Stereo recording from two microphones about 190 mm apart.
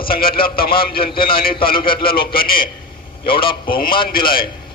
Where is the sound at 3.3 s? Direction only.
25° left (ahead or behind).